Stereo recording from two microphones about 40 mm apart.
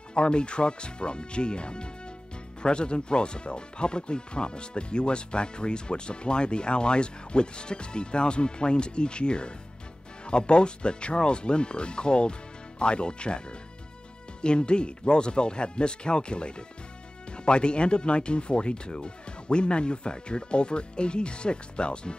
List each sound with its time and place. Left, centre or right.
0.1 s speech: left